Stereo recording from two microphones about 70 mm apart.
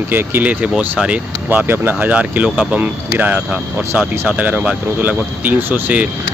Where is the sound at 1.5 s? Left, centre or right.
Right.